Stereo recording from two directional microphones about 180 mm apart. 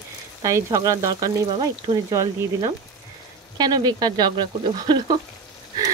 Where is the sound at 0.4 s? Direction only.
20° right (ahead or behind).